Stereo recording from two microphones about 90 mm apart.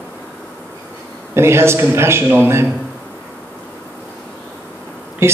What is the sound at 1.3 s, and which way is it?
A man's voice, 30° right (ahead or behind).